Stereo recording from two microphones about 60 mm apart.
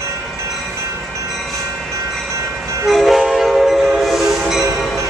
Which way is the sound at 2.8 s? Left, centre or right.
Centre.